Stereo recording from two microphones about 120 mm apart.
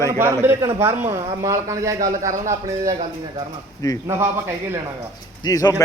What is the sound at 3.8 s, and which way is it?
Speech, 30° left (ahead or behind).